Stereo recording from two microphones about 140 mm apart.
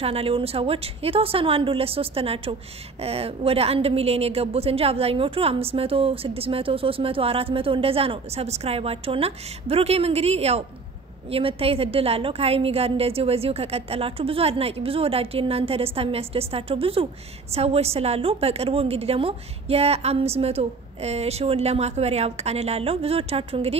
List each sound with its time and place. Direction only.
0.0 s a woman's voice: 45° right (ahead or behind)